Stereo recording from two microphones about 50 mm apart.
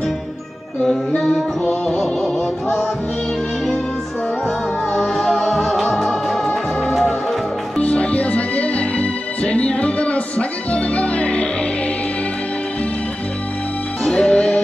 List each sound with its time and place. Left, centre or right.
1.6 s music: centre
2.0 s music: centre
4.9 s music: centre
7.7 s music: left
14.0 s music: centre